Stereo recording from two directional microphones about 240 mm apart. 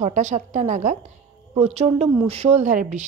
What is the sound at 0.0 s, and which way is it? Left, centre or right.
A woman's voice, right.